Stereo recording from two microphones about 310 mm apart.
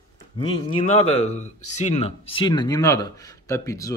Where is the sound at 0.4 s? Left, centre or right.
Centre.